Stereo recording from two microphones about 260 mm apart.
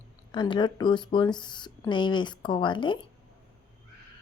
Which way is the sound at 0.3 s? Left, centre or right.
Centre.